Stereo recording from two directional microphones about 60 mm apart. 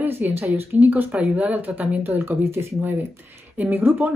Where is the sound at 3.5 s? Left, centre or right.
Right.